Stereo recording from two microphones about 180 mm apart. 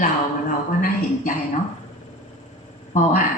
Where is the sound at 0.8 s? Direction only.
50° left (ahead or behind).